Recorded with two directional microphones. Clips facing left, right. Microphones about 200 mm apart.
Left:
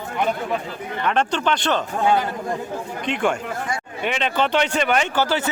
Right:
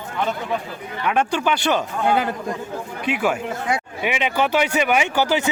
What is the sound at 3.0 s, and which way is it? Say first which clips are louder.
Speech: right 1 dB; 5° right (ahead or behind).